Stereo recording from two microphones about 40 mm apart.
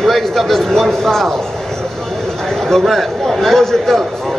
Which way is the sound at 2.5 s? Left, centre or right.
Centre.